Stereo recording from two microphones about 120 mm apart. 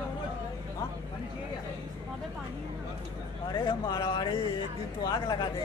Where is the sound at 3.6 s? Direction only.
40° left (ahead or behind).